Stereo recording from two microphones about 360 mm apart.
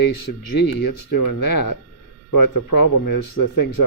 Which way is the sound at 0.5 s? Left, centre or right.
Left.